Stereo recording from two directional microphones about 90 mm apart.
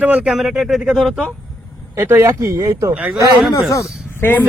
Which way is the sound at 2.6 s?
40° right (ahead or behind).